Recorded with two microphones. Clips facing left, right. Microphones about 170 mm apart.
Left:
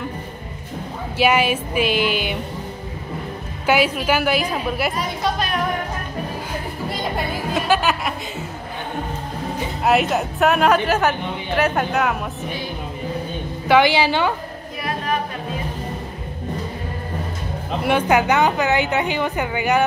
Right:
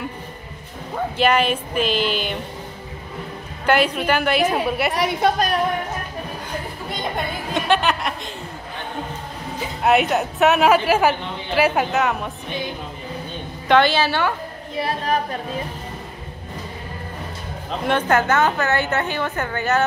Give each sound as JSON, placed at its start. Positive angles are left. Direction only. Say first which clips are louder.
{"t": 1.1, "sound": "a woman's voice", "louder": "left 1 dB", "side_deg": 5}
{"t": 3.6, "sound": "a woman's voice", "louder": "even", "side_deg": 5}
{"t": 4.9, "sound": "a woman's voice", "louder": "right 4 dB", "side_deg": -70}
{"t": 7.5, "sound": "a sound", "louder": "even", "side_deg": 5}
{"t": 9.8, "sound": "a woman's voice", "louder": "right 1 dB", "side_deg": 0}
{"t": 13.7, "sound": "a woman's voice", "louder": "left 1 dB", "side_deg": 10}
{"t": 14.8, "sound": "chatter", "louder": "right 2 dB", "side_deg": -30}
{"t": 17.6, "sound": "a woman's voice", "louder": "left 2 dB", "side_deg": 10}